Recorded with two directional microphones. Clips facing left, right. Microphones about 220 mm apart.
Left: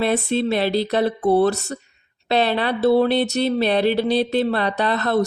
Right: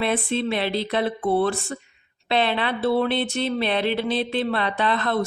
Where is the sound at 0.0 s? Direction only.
40° left (ahead or behind).